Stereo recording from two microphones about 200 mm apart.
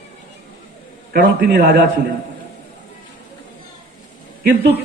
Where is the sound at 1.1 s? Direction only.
55° right (ahead or behind).